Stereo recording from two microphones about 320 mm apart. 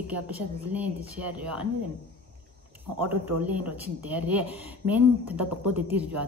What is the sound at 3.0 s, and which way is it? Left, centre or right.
Speech, right.